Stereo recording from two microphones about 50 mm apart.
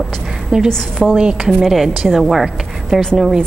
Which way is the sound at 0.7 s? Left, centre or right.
Centre.